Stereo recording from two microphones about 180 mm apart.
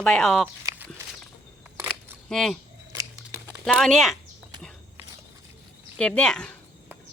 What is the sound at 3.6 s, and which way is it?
Speech, centre (ahead or behind).